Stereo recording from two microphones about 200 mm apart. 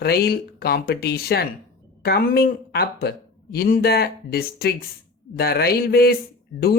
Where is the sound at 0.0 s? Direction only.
50° left (ahead or behind).